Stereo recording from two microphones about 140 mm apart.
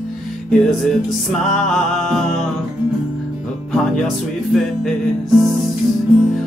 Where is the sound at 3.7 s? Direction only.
Centre (ahead or behind).